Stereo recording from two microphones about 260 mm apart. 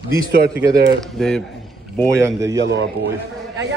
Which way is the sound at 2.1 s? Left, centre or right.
Centre.